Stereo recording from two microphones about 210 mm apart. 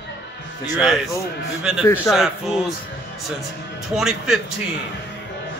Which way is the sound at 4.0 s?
Centre (ahead or behind).